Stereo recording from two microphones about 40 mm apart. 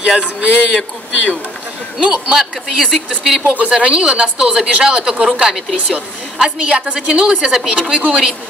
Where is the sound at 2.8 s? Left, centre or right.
Centre.